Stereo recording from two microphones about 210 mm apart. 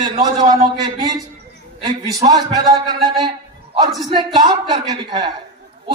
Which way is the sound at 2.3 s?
20° right (ahead or behind).